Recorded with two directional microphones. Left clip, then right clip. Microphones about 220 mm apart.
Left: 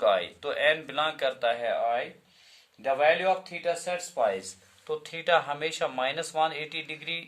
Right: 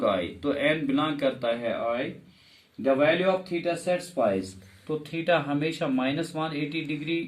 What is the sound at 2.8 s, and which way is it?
Speech, 45° left (ahead or behind).